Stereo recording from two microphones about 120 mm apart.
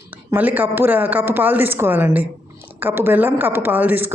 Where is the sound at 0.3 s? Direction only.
15° right (ahead or behind).